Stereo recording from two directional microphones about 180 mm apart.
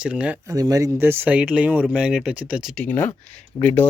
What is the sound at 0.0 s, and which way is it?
Speech, 5° right (ahead or behind).